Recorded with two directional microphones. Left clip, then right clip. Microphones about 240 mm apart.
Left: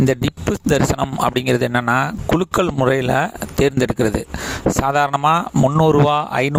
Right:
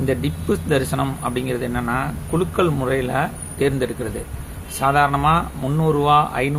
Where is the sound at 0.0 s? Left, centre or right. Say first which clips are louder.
Left 4 dB; left.